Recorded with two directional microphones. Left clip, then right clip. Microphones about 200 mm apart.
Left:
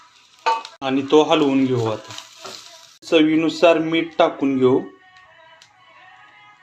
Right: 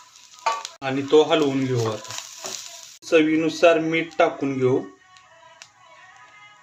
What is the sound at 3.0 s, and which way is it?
Speech, 15° left (ahead or behind).